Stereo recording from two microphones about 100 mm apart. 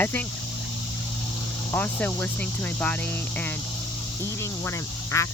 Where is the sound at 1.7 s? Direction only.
15° left (ahead or behind).